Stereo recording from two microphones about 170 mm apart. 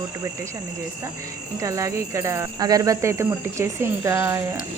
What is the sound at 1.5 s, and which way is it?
Speech, 20° right (ahead or behind).